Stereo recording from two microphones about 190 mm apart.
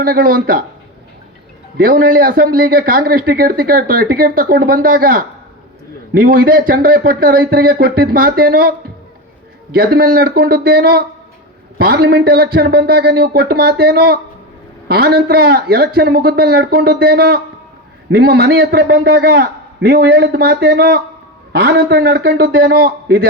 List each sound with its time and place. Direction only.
0.0 s a man's voice: 50° right (ahead or behind)
1.8 s a man's voice: 50° right (ahead or behind)
9.7 s a man's voice: 50° right (ahead or behind)